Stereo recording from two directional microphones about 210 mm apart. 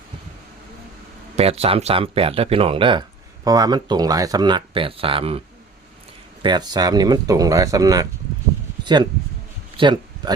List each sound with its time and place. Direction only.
1.4 s speech: 30° right (ahead or behind)
6.4 s speech: 20° right (ahead or behind)
8.8 s a sound: 20° right (ahead or behind)